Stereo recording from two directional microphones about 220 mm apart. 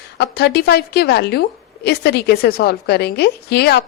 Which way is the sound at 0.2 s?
50° left (ahead or behind).